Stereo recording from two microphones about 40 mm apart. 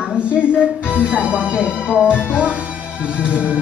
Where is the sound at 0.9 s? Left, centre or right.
Right.